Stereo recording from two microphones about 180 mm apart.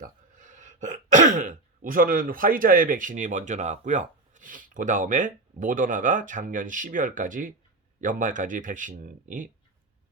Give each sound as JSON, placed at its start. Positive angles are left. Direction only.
{"t": 0.0, "sound": "speech", "side_deg": -45}